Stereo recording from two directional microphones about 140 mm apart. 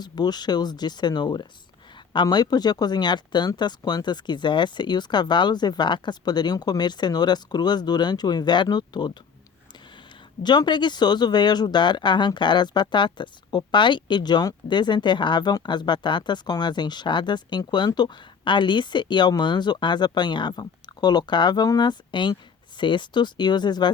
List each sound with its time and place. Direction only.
0.0 s speech: 30° left (ahead or behind)
10.4 s speech: 30° left (ahead or behind)